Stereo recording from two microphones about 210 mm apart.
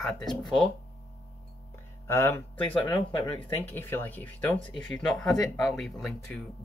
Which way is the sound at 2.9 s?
25° left (ahead or behind).